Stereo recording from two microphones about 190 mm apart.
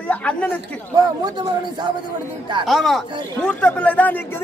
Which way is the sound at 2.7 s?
Centre (ahead or behind).